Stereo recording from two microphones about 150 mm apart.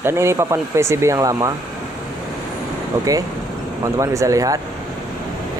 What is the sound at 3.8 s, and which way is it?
Speech, 20° right (ahead or behind).